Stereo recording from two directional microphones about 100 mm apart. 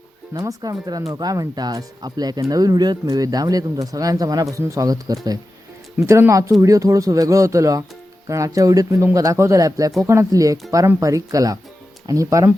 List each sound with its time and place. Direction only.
0.3 s speech: 40° right (ahead or behind)
6.0 s speech: 30° right (ahead or behind)